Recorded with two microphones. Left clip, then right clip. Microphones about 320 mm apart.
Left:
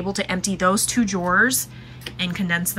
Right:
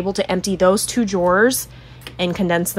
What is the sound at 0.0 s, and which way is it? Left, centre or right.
Speech, centre.